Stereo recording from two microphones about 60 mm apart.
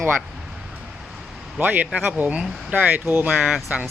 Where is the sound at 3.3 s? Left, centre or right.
Centre.